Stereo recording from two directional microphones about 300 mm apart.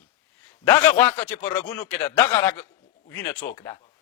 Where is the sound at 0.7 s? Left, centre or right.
Centre.